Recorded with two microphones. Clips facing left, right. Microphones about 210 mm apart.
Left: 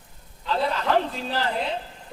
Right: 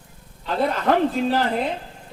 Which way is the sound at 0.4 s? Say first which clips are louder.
Right 4 dB; 50° right (ahead or behind).